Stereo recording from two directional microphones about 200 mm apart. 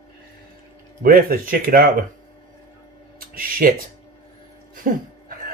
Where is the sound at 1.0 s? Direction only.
45° right (ahead or behind).